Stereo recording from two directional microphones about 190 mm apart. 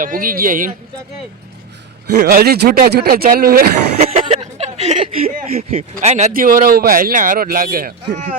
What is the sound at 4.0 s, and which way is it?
Speech, 30° right (ahead or behind).